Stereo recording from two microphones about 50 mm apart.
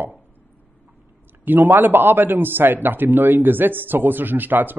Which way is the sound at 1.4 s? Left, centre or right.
Right.